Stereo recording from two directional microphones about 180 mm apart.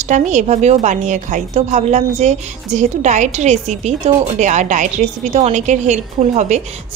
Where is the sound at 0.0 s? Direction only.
40° right (ahead or behind).